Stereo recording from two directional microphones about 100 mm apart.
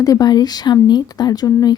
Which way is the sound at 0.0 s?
40° left (ahead or behind).